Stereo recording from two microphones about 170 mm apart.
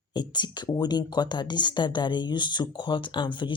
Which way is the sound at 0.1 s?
25° left (ahead or behind).